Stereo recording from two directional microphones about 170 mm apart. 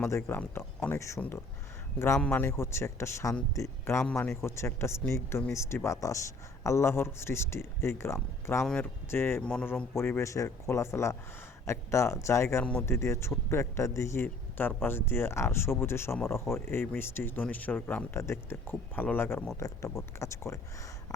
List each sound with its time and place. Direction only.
0.3 s speech: 10° left (ahead or behind)